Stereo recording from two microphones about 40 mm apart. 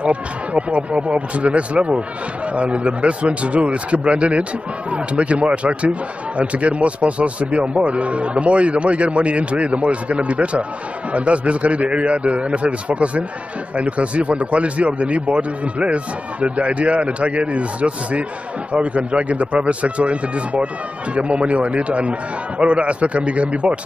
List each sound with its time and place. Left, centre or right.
0.0 s speech: right